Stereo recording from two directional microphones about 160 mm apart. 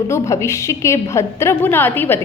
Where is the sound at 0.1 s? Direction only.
15° left (ahead or behind).